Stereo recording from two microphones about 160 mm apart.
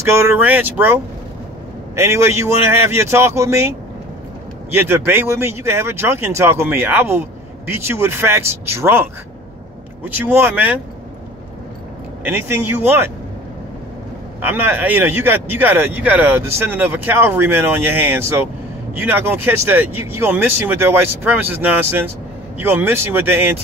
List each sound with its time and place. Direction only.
0.0 s speech: 15° right (ahead or behind)
2.0 s speech: 15° right (ahead or behind)
12.2 s speech: 15° right (ahead or behind)
14.4 s speech: 10° right (ahead or behind)